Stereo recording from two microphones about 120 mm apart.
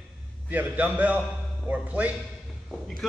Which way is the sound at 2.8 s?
Centre (ahead or behind).